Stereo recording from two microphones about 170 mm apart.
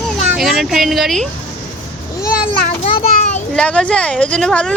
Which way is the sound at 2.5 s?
35° left (ahead or behind).